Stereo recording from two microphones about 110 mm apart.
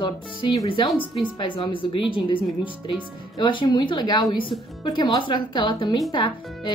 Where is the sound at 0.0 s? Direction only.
45° left (ahead or behind).